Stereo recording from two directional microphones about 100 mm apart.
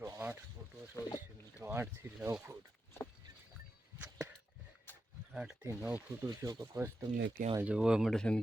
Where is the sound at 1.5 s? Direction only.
25° right (ahead or behind).